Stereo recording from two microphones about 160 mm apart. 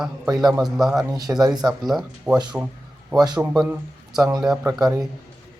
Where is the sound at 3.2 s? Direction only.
25° right (ahead or behind).